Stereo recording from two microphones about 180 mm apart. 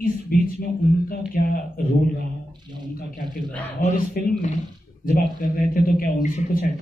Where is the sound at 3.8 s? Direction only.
40° left (ahead or behind).